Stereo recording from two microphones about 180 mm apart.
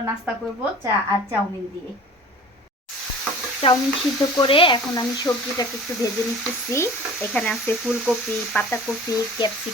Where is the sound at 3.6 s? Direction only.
35° left (ahead or behind); by 8.9 s 5° left (ahead or behind).